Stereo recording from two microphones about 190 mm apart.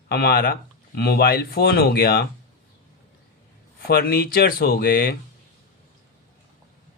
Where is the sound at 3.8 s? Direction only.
50° left (ahead or behind).